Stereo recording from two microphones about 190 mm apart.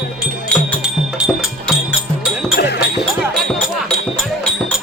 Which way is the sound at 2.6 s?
60° left (ahead or behind).